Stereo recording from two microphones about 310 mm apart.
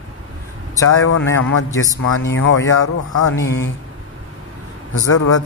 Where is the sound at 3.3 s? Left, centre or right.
Left.